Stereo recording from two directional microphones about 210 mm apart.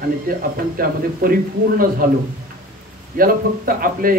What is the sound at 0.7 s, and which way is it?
A man's voice, 45° right (ahead or behind).